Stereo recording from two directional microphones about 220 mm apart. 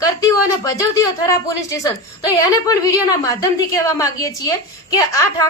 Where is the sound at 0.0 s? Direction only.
15° left (ahead or behind).